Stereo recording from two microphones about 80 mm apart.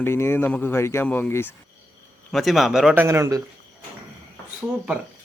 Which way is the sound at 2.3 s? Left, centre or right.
Centre.